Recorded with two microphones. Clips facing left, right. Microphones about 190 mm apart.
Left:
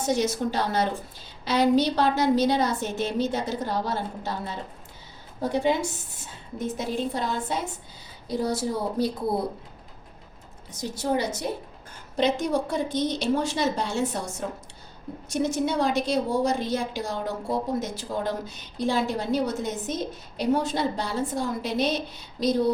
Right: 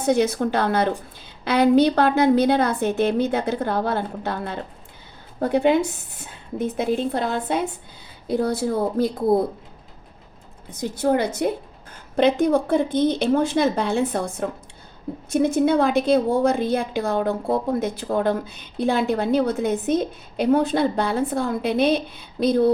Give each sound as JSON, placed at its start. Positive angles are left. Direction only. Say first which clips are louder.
{"t": 0.0, "sound": "a woman's voice", "louder": "right 5 dB", "side_deg": -60}
{"t": 10.7, "sound": "a woman's voice", "louder": "right 6 dB", "side_deg": -55}